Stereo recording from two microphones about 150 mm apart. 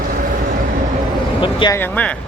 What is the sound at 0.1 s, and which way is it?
Vehicle, 70° right (ahead or behind).